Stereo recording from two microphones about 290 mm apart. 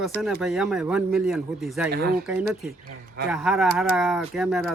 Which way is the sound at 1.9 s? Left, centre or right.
Right.